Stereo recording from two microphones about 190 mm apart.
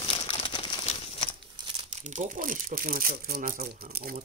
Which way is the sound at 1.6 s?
35° right (ahead or behind).